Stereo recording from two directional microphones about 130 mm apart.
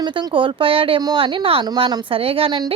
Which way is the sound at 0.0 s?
35° right (ahead or behind).